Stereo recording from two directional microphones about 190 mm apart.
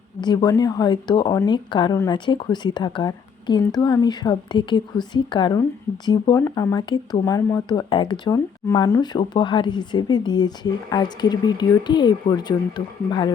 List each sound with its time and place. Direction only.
0.2 s speech: 20° left (ahead or behind)